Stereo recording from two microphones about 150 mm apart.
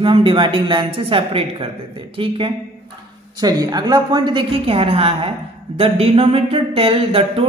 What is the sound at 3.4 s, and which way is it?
Speech, 25° right (ahead or behind).